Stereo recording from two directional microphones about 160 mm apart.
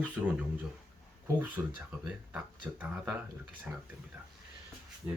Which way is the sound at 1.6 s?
15° right (ahead or behind).